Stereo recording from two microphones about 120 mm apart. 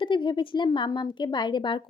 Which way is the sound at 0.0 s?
45° left (ahead or behind).